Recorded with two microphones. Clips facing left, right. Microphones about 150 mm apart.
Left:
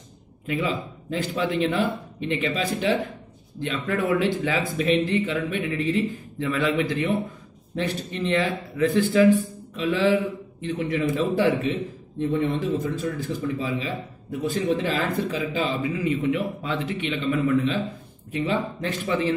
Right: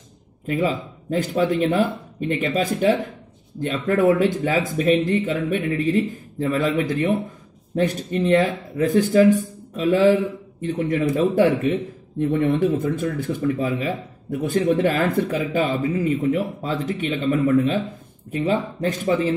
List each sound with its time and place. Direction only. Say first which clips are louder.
0.5 s speech: right 4 dB; 45° right (ahead or behind)